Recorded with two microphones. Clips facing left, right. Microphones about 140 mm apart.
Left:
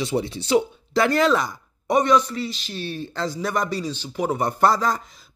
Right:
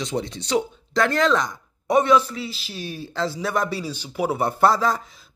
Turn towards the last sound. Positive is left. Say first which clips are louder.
# right 1 dB
turn(degrees=0)  # may be behind; listen again after turning